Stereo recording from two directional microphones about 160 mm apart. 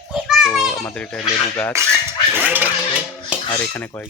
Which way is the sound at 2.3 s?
10° right (ahead or behind).